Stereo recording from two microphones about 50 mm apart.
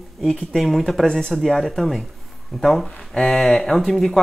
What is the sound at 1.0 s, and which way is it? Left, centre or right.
Speech, centre.